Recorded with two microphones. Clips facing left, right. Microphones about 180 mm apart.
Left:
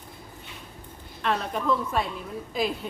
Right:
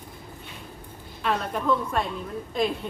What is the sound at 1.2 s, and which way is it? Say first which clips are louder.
A woman's voice: right 1 dB; centre (ahead or behind).